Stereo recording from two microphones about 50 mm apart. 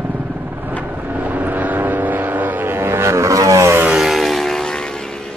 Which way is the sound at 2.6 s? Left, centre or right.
Right.